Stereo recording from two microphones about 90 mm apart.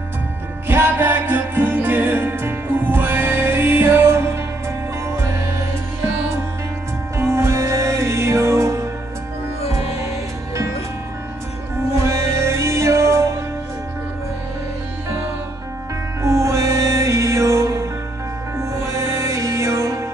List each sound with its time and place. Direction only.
0.7 s music: 25° right (ahead or behind)
7.2 s music: 30° right (ahead or behind)
12.0 s music: 30° right (ahead or behind)
16.2 s music: 35° right (ahead or behind)